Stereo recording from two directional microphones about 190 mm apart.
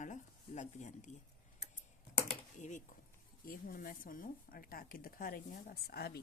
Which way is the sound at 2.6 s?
40° left (ahead or behind).